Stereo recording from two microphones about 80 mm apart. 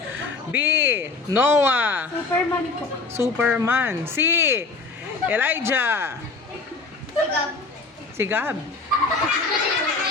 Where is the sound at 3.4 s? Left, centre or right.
Centre.